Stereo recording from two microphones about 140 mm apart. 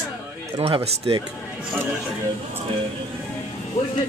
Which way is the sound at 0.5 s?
40° right (ahead or behind).